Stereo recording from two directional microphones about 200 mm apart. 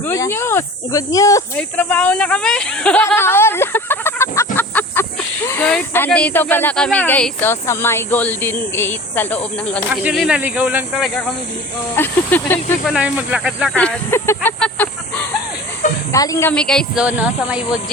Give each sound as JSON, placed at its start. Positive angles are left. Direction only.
{"t": 0.0, "sound": "speech", "side_deg": 15}
{"t": 10.0, "sound": "speech", "side_deg": -5}
{"t": 12.8, "sound": "speech", "side_deg": -5}